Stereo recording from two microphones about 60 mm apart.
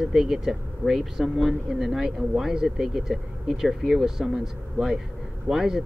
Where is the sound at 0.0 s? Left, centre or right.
Centre.